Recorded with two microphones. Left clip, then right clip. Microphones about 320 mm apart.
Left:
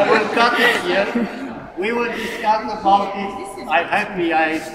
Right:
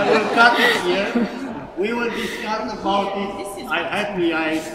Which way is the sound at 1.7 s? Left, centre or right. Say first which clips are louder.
Left 2 dB; centre.